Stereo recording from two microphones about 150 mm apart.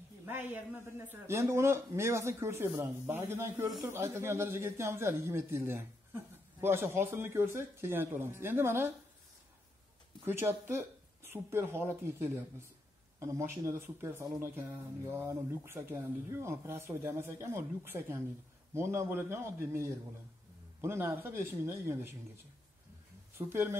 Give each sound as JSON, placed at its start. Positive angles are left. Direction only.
{"t": 0.2, "sound": "a man's voice", "side_deg": -10}
{"t": 10.2, "sound": "a man's voice", "side_deg": -15}
{"t": 23.3, "sound": "a man's voice", "side_deg": -15}